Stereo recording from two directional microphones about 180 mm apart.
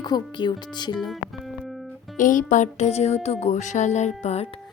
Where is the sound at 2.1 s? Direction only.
45° left (ahead or behind).